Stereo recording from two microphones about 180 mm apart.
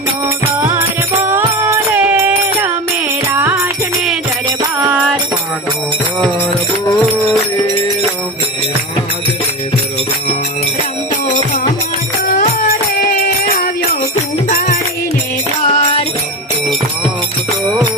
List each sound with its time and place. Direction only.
0.6 s music: 10° right (ahead or behind)
13.0 s music: 55° left (ahead or behind)
15.6 s music: 30° left (ahead or behind)